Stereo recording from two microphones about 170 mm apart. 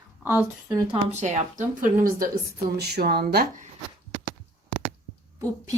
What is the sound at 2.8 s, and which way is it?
Speech, 70° right (ahead or behind).